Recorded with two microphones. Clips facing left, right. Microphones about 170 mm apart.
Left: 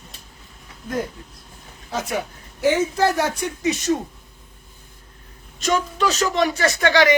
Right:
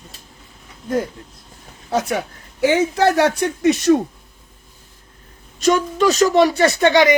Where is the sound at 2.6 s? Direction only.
75° right (ahead or behind).